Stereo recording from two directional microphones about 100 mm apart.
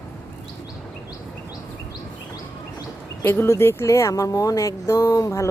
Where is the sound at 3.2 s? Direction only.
25° left (ahead or behind).